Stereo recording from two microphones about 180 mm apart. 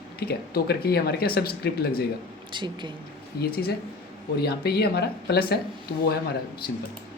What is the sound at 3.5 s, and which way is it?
Speech, 55° left (ahead or behind).